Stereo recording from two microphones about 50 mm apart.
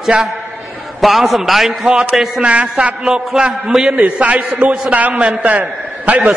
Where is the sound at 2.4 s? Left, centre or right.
Right.